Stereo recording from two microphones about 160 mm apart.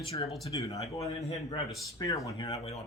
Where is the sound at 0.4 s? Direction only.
20° left (ahead or behind).